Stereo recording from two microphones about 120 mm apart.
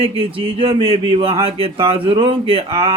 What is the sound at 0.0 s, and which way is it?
Speech, 50° right (ahead or behind).